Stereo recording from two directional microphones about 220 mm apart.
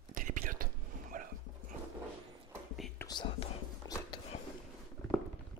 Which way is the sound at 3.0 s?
20° left (ahead or behind).